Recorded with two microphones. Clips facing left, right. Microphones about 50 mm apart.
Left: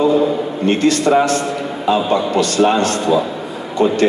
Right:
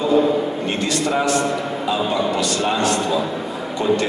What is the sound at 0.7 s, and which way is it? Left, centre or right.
Speech, left.